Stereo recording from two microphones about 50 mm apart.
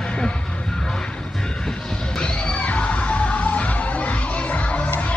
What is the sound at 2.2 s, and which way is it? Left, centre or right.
Music, left.